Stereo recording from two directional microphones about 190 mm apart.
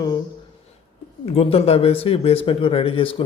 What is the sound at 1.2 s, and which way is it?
Speech, 30° left (ahead or behind).